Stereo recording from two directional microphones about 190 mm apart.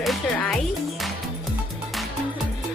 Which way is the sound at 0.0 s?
Centre (ahead or behind).